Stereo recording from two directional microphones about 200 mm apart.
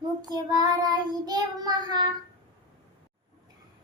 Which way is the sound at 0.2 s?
20° right (ahead or behind).